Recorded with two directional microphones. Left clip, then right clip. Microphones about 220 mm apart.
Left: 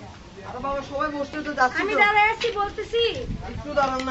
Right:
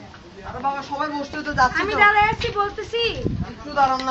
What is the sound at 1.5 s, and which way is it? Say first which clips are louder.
Speech: right 2 dB; 45° right (ahead or behind).